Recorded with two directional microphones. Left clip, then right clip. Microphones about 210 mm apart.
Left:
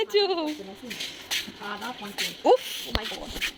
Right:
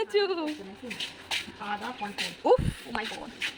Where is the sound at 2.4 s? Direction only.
5° right (ahead or behind).